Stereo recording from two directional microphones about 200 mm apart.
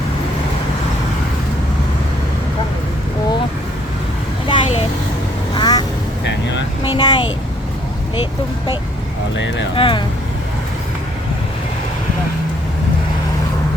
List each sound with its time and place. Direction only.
4.4 s a sound: 25° left (ahead or behind)
5.5 s quack: 20° left (ahead or behind)
6.8 s vehicle: 25° left (ahead or behind)
9.3 s speech: 65° left (ahead or behind)
9.7 s speech: 25° left (ahead or behind)